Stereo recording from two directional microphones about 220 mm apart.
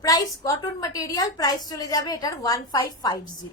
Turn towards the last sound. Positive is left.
turn(degrees=15)  # may be behind; listen again after turning